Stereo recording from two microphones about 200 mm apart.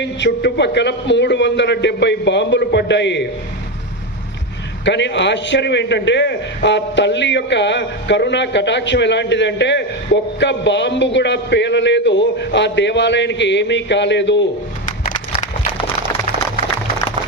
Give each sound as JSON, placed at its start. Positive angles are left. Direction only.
{"t": 0.0, "sound": "a man's voice", "side_deg": 60}
{"t": 4.9, "sound": "a man's voice", "side_deg": 60}
{"t": 14.8, "sound": "a sound", "side_deg": 40}